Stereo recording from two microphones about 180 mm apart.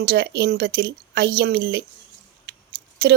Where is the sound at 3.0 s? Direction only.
65° right (ahead or behind).